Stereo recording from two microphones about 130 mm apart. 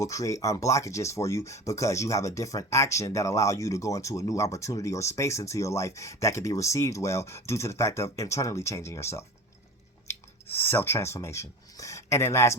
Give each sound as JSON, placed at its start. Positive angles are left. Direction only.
{"t": 0.0, "sound": "speech", "side_deg": 25}